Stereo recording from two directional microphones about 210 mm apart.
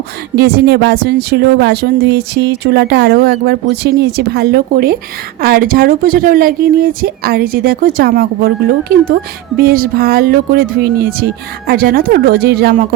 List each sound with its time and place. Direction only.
0.3 s speech: 50° right (ahead or behind)
9.6 s speech: 45° right (ahead or behind)